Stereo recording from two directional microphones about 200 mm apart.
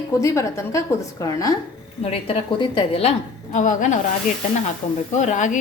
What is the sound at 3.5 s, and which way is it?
Speech, 40° left (ahead or behind).